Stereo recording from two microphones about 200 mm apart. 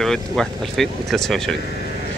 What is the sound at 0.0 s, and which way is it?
Speech, centre (ahead or behind).